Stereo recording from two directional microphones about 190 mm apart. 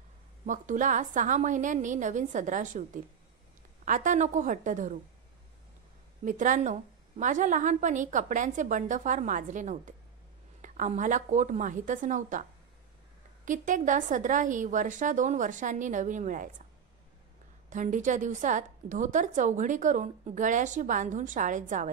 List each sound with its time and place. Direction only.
0.5 s a woman's voice: 40° right (ahead or behind)
6.2 s a woman's voice: 40° right (ahead or behind)
13.5 s a woman's voice: 40° right (ahead or behind)
17.6 s a woman's voice: 40° right (ahead or behind)